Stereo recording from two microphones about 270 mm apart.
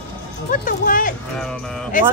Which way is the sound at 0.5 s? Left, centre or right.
Left.